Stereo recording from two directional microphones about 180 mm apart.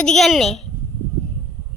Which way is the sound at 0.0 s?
Centre (ahead or behind).